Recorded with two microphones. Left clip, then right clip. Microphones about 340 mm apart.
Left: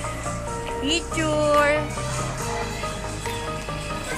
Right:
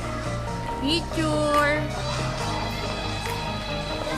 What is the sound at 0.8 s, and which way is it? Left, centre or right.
Speech, centre.